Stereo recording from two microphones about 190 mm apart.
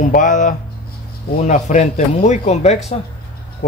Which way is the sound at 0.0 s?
40° left (ahead or behind).